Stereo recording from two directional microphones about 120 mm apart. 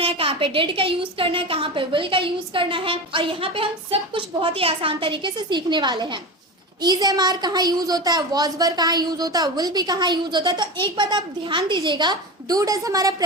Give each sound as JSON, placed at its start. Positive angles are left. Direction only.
{"t": 0.0, "sound": "a woman's voice", "side_deg": -50}